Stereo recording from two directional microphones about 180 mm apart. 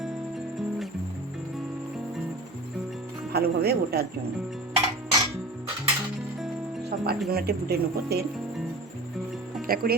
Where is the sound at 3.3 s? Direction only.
60° right (ahead or behind).